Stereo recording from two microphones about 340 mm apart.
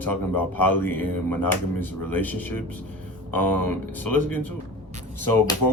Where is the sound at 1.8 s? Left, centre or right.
Centre.